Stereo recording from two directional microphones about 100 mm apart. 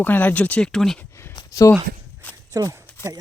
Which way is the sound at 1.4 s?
35° left (ahead or behind).